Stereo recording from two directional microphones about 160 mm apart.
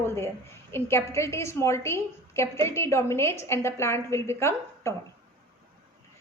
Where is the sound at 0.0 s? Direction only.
15° left (ahead or behind).